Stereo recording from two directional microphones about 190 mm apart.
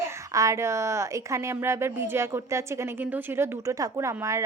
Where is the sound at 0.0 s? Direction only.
15° right (ahead or behind).